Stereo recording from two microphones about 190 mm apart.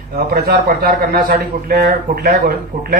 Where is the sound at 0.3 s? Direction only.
55° right (ahead or behind).